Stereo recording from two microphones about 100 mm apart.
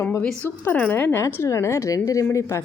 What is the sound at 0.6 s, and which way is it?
A woman's voice, 20° left (ahead or behind).